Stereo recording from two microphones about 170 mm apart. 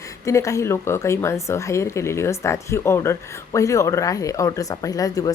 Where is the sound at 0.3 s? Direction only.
20° left (ahead or behind).